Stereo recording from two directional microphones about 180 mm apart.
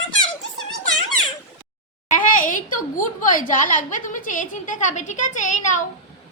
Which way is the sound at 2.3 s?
45° left (ahead or behind).